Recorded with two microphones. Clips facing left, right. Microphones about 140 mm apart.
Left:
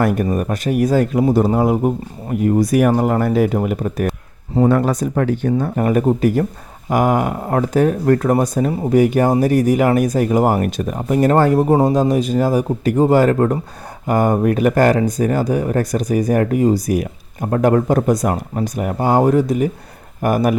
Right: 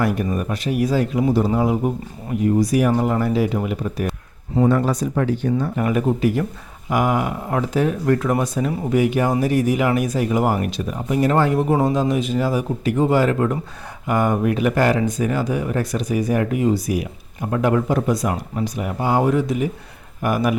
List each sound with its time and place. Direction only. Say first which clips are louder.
0.0 s speech: left 4 dB; 50° left (ahead or behind)